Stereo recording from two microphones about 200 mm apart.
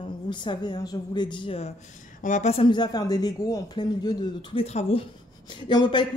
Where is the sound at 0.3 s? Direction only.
25° left (ahead or behind).